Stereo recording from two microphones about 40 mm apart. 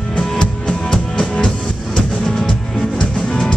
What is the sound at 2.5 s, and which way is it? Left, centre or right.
Music, left.